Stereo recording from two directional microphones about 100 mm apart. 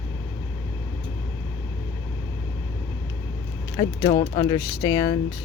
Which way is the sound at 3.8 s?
40° left (ahead or behind).